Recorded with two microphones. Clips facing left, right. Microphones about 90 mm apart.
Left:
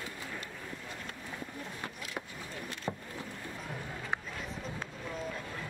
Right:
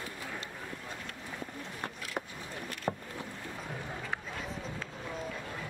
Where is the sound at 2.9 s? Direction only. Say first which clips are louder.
Right 4 dB; 30° right (ahead or behind).